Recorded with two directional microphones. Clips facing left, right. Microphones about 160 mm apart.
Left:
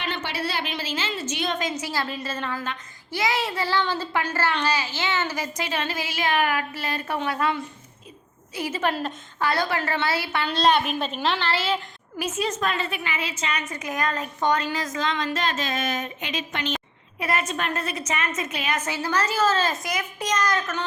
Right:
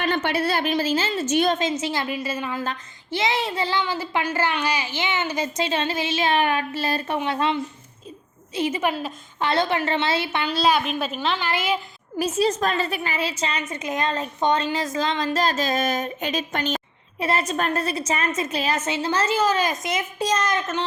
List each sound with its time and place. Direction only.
0.0 s a woman's voice: 55° right (ahead or behind)
1.5 s a child's voice: 25° right (ahead or behind)
2.1 s speech: 10° right (ahead or behind)
2.6 s a child's voice: 25° right (ahead or behind)
8.8 s a woman's voice: 5° right (ahead or behind)
9.4 s a child's voice: 25° right (ahead or behind)
10.4 s a woman's voice: 5° right (ahead or behind)
11.4 s speech: 15° right (ahead or behind)
12.1 s a woman's voice: 35° right (ahead or behind)
17.2 s a woman's voice: 30° right (ahead or behind)